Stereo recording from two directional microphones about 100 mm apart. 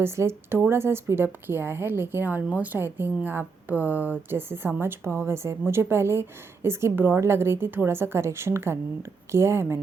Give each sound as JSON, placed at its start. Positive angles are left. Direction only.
{"t": 0.0, "sound": "a woman's voice", "side_deg": -25}